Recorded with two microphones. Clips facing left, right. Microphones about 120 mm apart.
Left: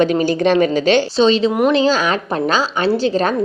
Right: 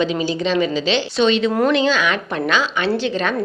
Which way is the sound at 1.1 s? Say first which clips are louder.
Left 3 dB; 30° left (ahead or behind).